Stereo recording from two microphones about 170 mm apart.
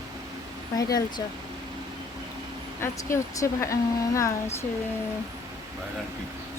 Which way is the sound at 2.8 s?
15° left (ahead or behind).